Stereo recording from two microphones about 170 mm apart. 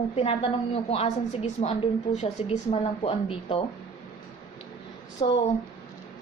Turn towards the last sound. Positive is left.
turn(degrees=30)  # may be behind; listen again after turning